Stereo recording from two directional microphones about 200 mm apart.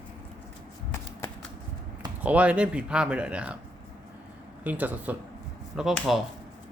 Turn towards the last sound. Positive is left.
turn(degrees=0)  # may be behind; listen again after turning